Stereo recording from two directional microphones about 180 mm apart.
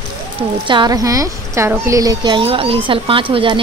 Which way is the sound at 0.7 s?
20° right (ahead or behind).